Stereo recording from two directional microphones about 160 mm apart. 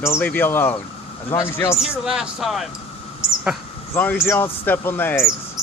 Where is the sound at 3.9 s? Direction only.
15° left (ahead or behind).